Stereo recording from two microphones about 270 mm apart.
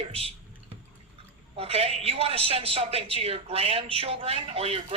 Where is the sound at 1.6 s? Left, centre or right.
Right.